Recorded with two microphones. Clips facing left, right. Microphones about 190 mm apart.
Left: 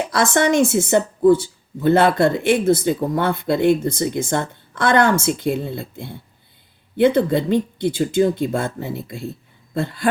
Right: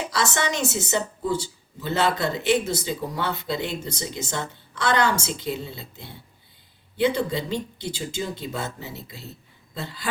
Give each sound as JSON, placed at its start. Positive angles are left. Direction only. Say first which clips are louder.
{"t": 0.0, "sound": "speech", "louder": "left 8 dB", "side_deg": 50}